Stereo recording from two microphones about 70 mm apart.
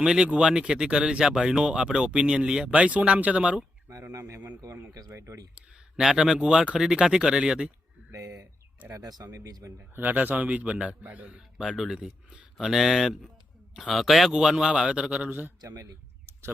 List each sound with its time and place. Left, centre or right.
0.0 s speech: centre
3.8 s a man's voice: right
6.0 s speech: centre
8.1 s a sound: right
9.0 s speech: right
9.9 s a man's voice: right
11.3 s speech: centre
15.3 s a man's voice: right
15.6 s speech: right